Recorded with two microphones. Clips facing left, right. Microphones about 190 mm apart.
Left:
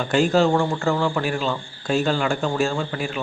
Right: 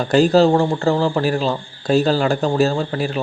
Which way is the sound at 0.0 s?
35° right (ahead or behind).